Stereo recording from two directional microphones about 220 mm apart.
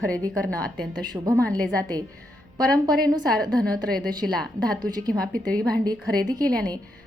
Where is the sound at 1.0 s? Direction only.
15° right (ahead or behind).